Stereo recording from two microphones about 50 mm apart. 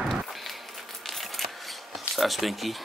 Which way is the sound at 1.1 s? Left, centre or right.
Centre.